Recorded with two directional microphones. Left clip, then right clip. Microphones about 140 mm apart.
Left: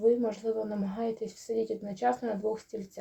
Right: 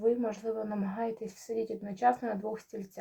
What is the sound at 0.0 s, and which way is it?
Speech, 30° left (ahead or behind).